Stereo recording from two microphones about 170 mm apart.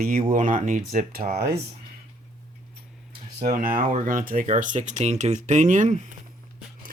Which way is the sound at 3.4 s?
60° right (ahead or behind).